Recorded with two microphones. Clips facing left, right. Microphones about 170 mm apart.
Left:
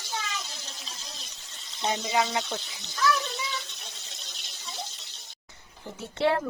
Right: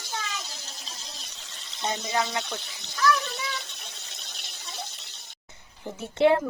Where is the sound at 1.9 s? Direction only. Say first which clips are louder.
Left 2 dB; 15° left (ahead or behind).